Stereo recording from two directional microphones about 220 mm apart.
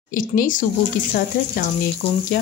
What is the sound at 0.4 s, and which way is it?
Speech, 35° left (ahead or behind).